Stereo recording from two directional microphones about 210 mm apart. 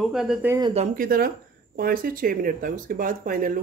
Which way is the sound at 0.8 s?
45° right (ahead or behind).